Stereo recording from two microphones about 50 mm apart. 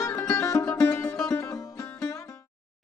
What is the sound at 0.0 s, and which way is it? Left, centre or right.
Music, left.